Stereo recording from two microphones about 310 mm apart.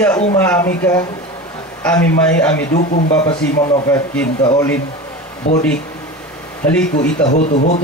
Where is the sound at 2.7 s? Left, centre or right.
Left.